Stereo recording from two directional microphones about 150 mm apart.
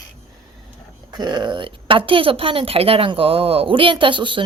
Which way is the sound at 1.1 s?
30° right (ahead or behind).